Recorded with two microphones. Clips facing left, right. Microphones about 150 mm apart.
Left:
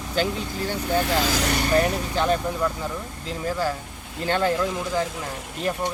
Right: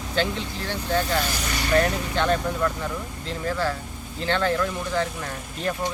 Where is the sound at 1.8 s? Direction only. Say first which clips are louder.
Right 3 dB; 5° left (ahead or behind).